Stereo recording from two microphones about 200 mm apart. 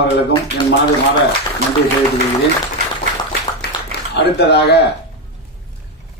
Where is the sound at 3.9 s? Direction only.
55° left (ahead or behind).